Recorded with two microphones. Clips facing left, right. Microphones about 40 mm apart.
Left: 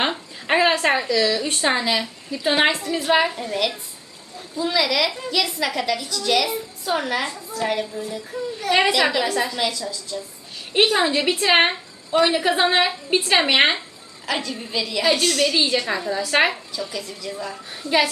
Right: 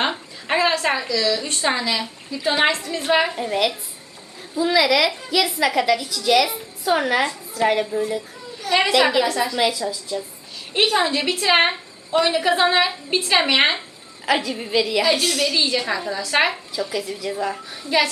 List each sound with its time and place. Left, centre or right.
0.0 s a woman's voice: centre
3.1 s a woman's voice: centre
3.3 s a woman's voice: right
4.5 s a woman's voice: centre
8.9 s a woman's voice: centre
9.6 s a woman's voice: centre
10.8 s a woman's voice: centre
14.3 s a woman's voice: centre
15.1 s a woman's voice: centre
16.9 s a woman's voice: centre
17.7 s a woman's voice: centre